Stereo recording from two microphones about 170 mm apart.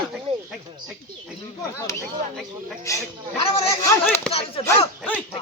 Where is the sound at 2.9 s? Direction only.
15° left (ahead or behind).